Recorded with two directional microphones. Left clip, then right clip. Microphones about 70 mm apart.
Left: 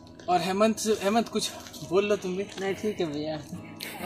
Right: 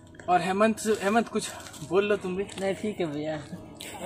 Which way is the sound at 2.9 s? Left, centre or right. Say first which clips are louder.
Even; right.